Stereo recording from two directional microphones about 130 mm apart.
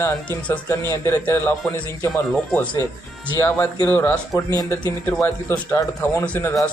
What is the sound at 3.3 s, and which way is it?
Speech, 15° left (ahead or behind).